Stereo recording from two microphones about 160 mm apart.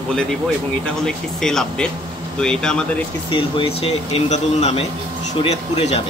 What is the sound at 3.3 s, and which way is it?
Speech, 35° left (ahead or behind).